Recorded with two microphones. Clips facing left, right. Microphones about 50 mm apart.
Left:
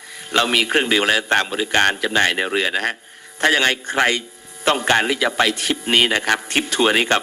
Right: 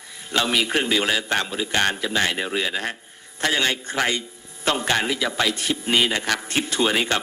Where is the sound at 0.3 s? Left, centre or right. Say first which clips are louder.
Left 4 dB; left.